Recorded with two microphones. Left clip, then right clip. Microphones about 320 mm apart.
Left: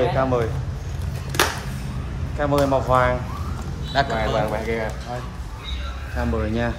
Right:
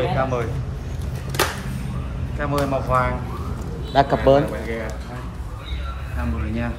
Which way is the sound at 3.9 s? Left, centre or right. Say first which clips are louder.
Right 6 dB; centre.